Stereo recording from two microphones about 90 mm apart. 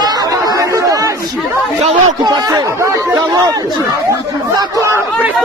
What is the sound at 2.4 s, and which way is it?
Speech, 40° right (ahead or behind).